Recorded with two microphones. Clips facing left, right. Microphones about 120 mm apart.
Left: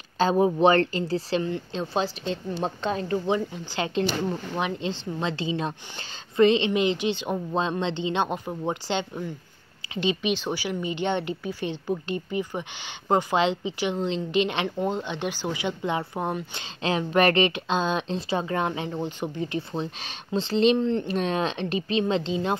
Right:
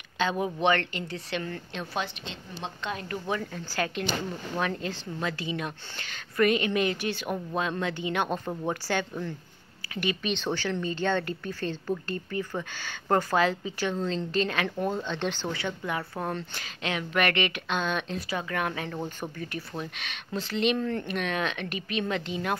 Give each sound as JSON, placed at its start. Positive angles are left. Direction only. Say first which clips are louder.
{"t": 0.2, "sound": "a woman's voice", "louder": "left 7 dB", "side_deg": 35}